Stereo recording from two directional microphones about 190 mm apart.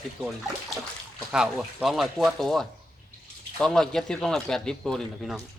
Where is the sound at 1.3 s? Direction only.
5° right (ahead or behind).